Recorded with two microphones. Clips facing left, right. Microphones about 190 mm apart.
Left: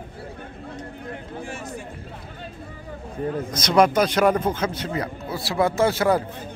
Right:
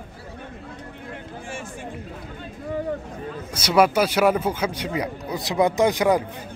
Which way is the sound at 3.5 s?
10° right (ahead or behind).